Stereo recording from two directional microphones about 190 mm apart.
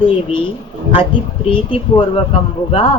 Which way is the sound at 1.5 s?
30° left (ahead or behind).